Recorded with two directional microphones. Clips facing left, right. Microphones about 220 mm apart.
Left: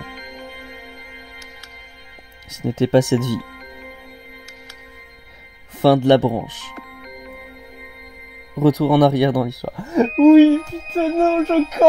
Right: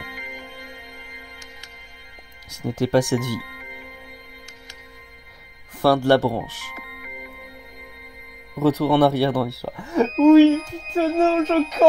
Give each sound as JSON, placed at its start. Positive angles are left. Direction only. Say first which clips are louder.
{"t": 2.5, "sound": "speech", "louder": "left 4 dB", "side_deg": 25}
{"t": 5.8, "sound": "speech", "louder": "left 4 dB", "side_deg": 20}
{"t": 8.5, "sound": "speech", "louder": "left 3 dB", "side_deg": 15}
{"t": 10.0, "sound": "speech", "louder": "left 3 dB", "side_deg": -5}